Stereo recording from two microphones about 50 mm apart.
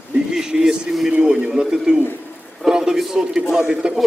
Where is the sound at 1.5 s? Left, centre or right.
Centre.